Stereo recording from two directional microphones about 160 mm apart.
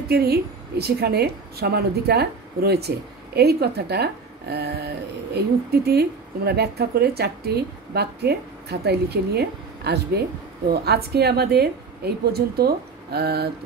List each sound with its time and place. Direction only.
0.1 s a woman's voice: 80° right